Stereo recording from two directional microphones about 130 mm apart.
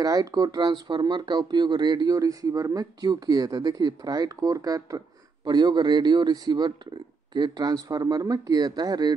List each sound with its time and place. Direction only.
0.0 s speech: 25° right (ahead or behind)